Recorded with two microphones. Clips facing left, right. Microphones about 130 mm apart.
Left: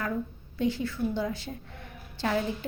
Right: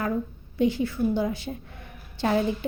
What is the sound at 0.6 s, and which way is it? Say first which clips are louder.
Speech: right 5 dB; 15° right (ahead or behind).